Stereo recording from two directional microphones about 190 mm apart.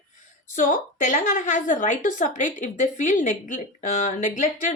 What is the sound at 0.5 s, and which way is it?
A woman's voice, 45° left (ahead or behind).